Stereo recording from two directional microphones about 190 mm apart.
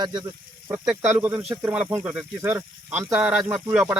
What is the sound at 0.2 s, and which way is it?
Speech, 10° right (ahead or behind).